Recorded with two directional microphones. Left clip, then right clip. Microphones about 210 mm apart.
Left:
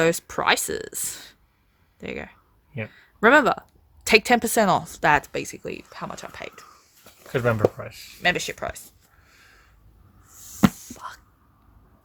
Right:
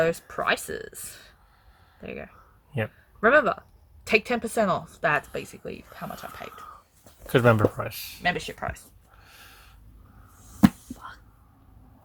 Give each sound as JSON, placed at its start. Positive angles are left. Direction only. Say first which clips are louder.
{"t": 0.0, "sound": "speech", "louder": "left 3 dB", "side_deg": 55}
{"t": 7.3, "sound": "speech", "louder": "right 1 dB", "side_deg": -30}
{"t": 8.2, "sound": "speech", "louder": "left 4 dB", "side_deg": 50}
{"t": 9.2, "sound": "a sound", "louder": "right 4 dB", "side_deg": -25}